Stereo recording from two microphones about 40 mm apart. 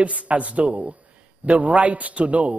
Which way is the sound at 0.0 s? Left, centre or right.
Right.